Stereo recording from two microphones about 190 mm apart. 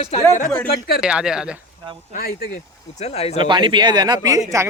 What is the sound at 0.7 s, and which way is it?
Speech, 55° left (ahead or behind).